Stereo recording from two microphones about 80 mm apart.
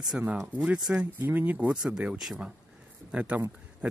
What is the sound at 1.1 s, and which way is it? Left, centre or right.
Speech, right.